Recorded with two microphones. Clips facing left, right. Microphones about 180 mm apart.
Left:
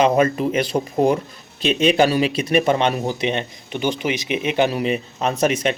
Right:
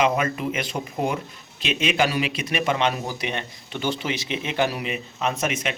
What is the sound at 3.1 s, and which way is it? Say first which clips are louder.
Speech: left 7 dB; 25° left (ahead or behind).